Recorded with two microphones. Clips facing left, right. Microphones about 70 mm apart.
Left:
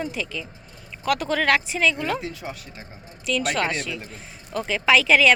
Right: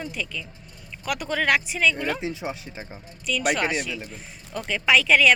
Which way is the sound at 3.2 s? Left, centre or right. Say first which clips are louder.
Even; centre.